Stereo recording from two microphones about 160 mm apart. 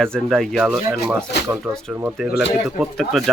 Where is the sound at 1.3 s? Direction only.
90° left.